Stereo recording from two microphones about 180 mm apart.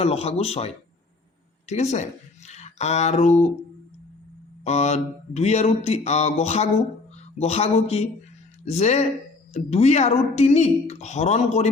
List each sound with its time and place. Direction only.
0.0 s speech: 35° left (ahead or behind)
2.5 s a sound: 40° left (ahead or behind)
4.6 s speech: 40° left (ahead or behind)